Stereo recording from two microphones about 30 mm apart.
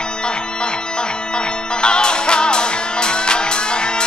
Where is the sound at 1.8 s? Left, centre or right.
Left.